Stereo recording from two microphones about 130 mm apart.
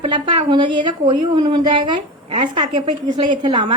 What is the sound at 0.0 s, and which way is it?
A woman's voice, 40° right (ahead or behind).